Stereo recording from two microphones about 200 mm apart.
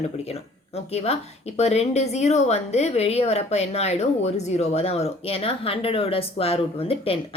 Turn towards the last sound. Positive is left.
turn(degrees=30)  # may be behind; listen again after turning